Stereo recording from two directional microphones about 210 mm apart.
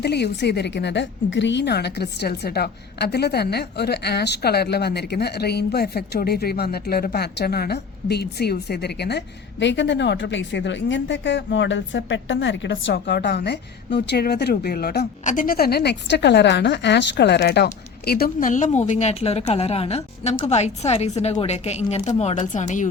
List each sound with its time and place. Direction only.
0.0 s a woman's voice: 50° left (ahead or behind); by 22.9 s 35° left (ahead or behind)